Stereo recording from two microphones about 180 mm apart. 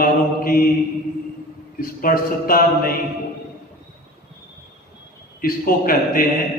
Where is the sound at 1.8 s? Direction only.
55° left (ahead or behind).